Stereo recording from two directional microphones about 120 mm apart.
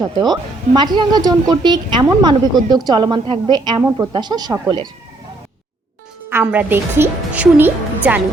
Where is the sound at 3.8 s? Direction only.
20° right (ahead or behind).